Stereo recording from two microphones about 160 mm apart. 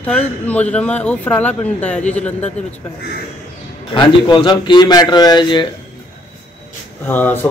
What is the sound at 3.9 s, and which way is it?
A man's voice, 30° left (ahead or behind).